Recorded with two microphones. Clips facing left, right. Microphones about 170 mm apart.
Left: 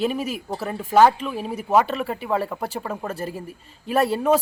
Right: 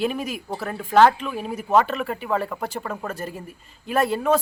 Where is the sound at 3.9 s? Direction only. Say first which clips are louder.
Left 1 dB; 35° left (ahead or behind).